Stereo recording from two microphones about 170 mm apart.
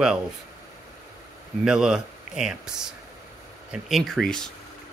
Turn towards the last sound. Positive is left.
turn(degrees=5)  # may be behind; listen again after turning